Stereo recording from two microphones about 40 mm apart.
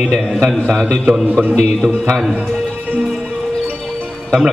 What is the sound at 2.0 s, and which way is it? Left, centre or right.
Speech, centre.